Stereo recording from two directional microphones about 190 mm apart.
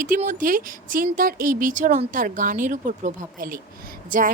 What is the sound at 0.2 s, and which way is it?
Speech, 45° right (ahead or behind).